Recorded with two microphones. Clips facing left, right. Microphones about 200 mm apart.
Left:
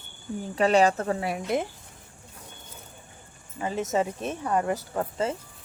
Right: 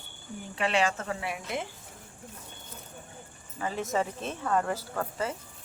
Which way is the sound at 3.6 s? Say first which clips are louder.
Left 3 dB; 20° left (ahead or behind).